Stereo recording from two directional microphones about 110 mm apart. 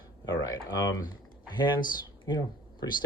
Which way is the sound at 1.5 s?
45° left (ahead or behind).